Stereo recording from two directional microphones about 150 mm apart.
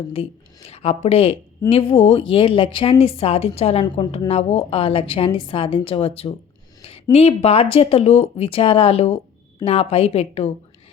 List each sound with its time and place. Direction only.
0.1 s a woman's voice: 40° left (ahead or behind)